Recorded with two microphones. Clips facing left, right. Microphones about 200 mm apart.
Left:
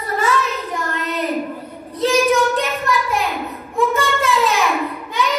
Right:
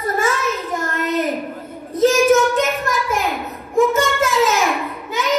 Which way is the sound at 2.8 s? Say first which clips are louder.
Left 1 dB; 45° right (ahead or behind).